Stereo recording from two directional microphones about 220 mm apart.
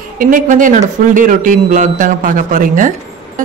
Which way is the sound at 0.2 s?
35° right (ahead or behind).